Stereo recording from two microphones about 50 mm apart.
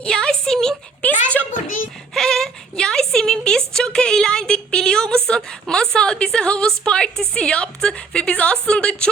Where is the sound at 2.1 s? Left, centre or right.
Centre.